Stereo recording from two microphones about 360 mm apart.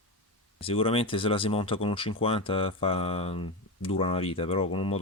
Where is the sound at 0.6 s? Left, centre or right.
Centre.